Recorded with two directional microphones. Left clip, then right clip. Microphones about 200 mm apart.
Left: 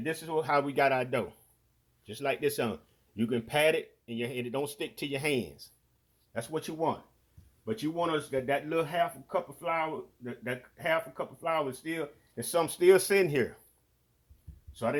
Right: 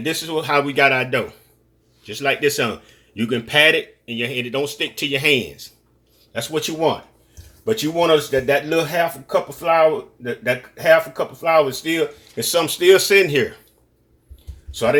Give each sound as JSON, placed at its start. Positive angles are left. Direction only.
{"t": 0.0, "sound": "speech", "side_deg": 35}
{"t": 7.6, "sound": "speech", "side_deg": 25}